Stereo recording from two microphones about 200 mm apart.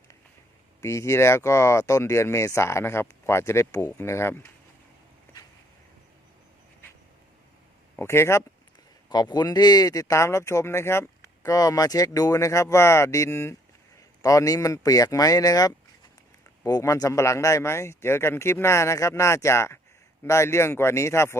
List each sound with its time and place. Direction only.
0.8 s speech: 15° left (ahead or behind)
7.9 s speech: 10° left (ahead or behind)